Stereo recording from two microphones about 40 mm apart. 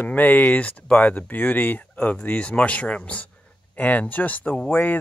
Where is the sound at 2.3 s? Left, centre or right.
Left.